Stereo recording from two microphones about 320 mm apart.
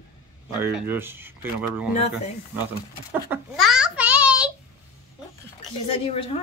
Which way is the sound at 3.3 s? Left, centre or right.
Centre.